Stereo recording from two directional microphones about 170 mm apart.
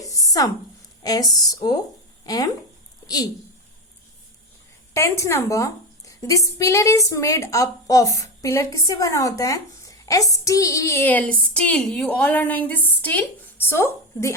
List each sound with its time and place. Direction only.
0.0 s a sound: 20° left (ahead or behind)
1.0 s a woman's voice: 20° left (ahead or behind)
4.9 s a woman's voice: 15° left (ahead or behind)